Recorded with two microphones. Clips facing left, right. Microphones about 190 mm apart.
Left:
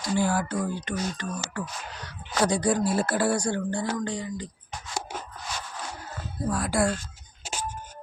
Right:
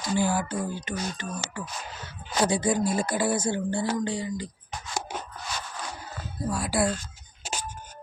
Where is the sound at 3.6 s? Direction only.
5° right (ahead or behind).